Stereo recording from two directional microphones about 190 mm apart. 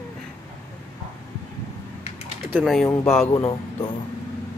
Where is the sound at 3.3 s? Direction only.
20° left (ahead or behind).